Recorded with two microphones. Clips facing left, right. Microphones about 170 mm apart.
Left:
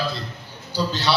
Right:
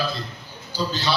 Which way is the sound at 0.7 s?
75° left (ahead or behind).